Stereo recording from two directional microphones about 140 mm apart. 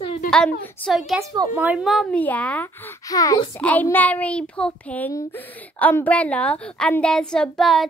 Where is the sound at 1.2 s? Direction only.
30° right (ahead or behind).